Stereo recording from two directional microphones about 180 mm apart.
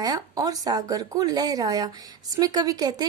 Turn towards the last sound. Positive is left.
turn(degrees=-20)  # may be behind; listen again after turning